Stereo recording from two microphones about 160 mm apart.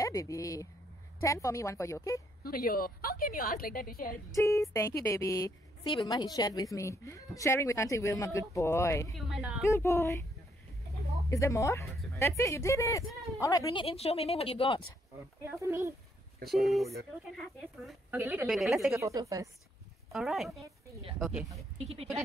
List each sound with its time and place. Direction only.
0.0 s a woman's voice: 20° left (ahead or behind)
2.4 s a woman's voice: 65° left (ahead or behind)
4.4 s a woman's voice: 20° left (ahead or behind)
9.1 s speech: 5° right (ahead or behind)
9.7 s speech: 15° left (ahead or behind)
11.2 s a woman's voice: 20° left (ahead or behind)
13.8 s speech: 40° left (ahead or behind)
15.4 s speech: 15° right (ahead or behind)
16.4 s speech: centre (ahead or behind)
18.1 s speech: 10° right (ahead or behind)
18.5 s speech: centre (ahead or behind)
18.9 s speech: 20° right (ahead or behind)
20.1 s speech: centre (ahead or behind)